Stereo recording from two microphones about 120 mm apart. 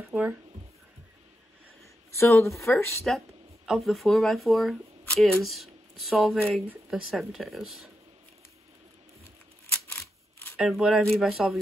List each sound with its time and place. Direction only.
0.1 s speech: 10° right (ahead or behind)
2.1 s speech: 25° left (ahead or behind)
3.1 s speech: 5° left (ahead or behind)
10.6 s speech: centre (ahead or behind)